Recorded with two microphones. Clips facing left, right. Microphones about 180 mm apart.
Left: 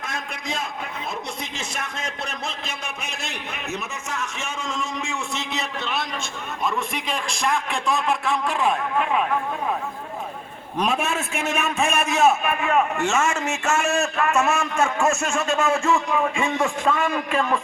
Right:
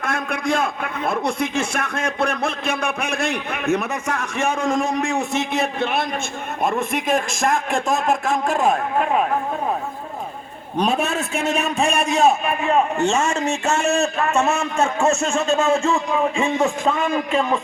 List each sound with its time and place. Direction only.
0.0 s a man's voice: 55° right (ahead or behind)
10.8 s a man's voice: 35° right (ahead or behind)